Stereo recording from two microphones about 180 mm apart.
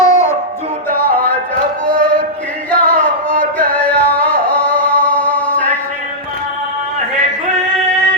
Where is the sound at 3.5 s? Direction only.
5° left (ahead or behind).